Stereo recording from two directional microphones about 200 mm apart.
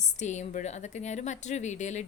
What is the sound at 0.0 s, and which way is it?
A woman's voice, 35° left (ahead or behind).